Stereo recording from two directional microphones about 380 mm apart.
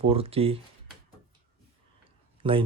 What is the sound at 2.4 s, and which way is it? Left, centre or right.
Speech, centre.